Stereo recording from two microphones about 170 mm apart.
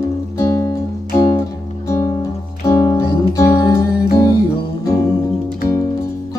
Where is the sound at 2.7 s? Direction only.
20° left (ahead or behind).